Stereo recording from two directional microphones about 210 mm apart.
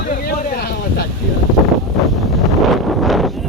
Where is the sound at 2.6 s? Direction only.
Centre (ahead or behind).